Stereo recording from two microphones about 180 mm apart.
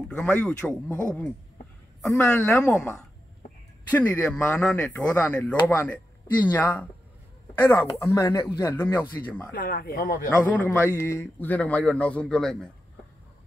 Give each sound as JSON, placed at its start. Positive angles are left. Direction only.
{"t": 0.1, "sound": "a man's voice", "side_deg": 10}
{"t": 9.5, "sound": "speech", "side_deg": 55}
{"t": 10.4, "sound": "a man's voice", "side_deg": 10}